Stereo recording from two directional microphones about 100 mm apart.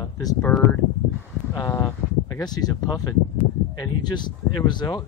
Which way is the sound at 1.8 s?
40° left (ahead or behind).